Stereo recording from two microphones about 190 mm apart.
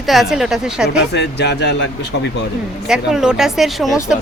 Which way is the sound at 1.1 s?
65° left (ahead or behind).